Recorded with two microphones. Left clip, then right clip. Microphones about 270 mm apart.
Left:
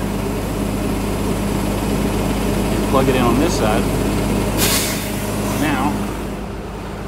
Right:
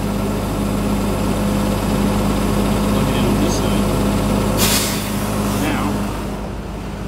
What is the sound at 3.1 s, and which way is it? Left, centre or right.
Vehicle, right.